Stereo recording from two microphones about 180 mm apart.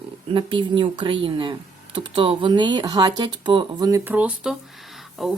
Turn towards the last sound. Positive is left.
turn(degrees=0)  # may be behind; listen again after turning